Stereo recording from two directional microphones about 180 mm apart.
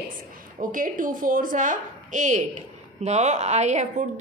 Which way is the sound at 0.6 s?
45° right (ahead or behind).